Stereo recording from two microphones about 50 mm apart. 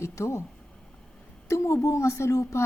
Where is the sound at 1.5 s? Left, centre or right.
Left.